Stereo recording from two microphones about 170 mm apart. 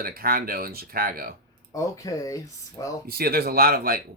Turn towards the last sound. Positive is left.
turn(degrees=-60)  # may be behind; listen again after turning